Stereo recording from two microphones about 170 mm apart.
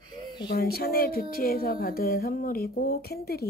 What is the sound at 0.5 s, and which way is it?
Music, 65° left (ahead or behind).